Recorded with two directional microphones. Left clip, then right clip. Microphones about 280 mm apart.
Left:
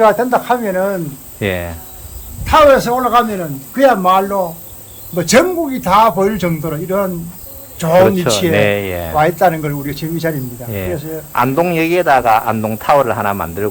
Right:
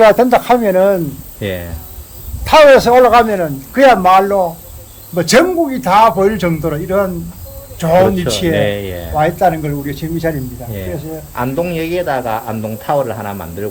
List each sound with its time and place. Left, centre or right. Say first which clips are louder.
0.0 s speech: right 3 dB; right
1.4 s a man's voice: left 3 dB; centre
2.4 s a man's voice: right 3 dB; centre